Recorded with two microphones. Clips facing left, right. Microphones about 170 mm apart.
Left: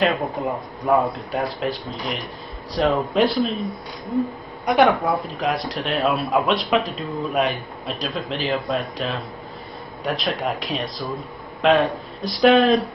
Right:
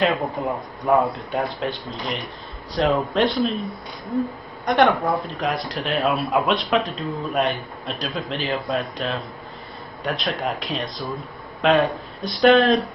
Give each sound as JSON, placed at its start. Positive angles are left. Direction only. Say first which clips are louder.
{"t": 0.0, "sound": "speech", "louder": "even", "side_deg": 0}